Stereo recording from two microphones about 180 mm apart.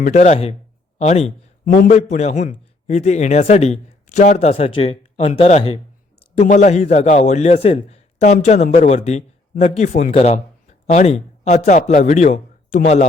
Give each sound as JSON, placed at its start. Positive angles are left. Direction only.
{"t": 0.0, "sound": "a man's voice", "side_deg": 40}
{"t": 1.6, "sound": "a man's voice", "side_deg": 50}